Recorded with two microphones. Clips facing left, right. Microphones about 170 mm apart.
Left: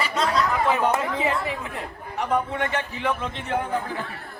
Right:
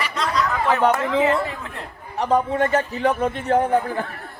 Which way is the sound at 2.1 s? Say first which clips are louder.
Right 5 dB; 35° right (ahead or behind).